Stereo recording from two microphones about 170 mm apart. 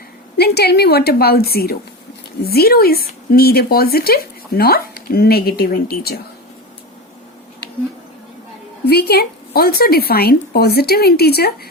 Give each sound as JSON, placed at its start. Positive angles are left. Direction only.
{"t": 0.3, "sound": "a woman's voice", "side_deg": 70}
{"t": 8.9, "sound": "a woman's voice", "side_deg": 70}